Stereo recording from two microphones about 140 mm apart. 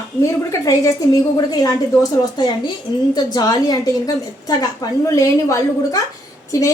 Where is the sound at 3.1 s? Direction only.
30° left (ahead or behind).